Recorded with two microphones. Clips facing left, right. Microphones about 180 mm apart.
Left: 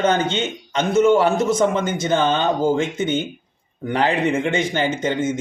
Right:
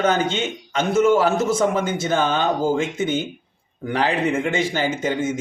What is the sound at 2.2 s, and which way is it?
Speech, 25° left (ahead or behind).